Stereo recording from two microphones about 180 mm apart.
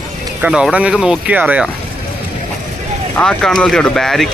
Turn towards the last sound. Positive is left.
turn(degrees=0)  # may be behind; listen again after turning